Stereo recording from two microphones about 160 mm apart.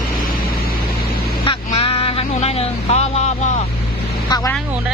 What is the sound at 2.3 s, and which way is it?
Speech, 40° left (ahead or behind).